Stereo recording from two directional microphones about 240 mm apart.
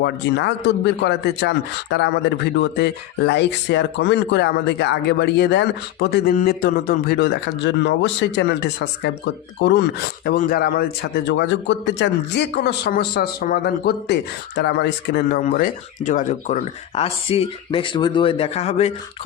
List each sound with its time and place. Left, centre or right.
0.0 s speech: left